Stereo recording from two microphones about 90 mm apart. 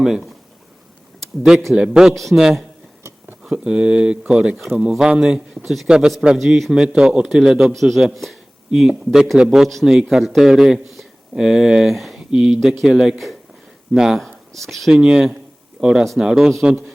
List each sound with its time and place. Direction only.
0.0 s speech: 5° right (ahead or behind)
1.7 s a man's voice: 10° right (ahead or behind)
16.6 s a man's voice: 20° right (ahead or behind)